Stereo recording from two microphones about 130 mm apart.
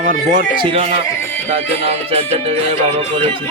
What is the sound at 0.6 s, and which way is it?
Music, 45° right (ahead or behind).